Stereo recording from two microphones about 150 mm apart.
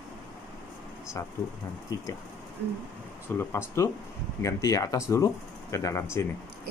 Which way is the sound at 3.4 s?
20° left (ahead or behind).